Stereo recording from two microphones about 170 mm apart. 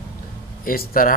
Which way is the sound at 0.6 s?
60° left (ahead or behind).